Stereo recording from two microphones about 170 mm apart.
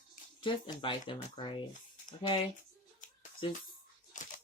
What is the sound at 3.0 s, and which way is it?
Music, 50° left (ahead or behind).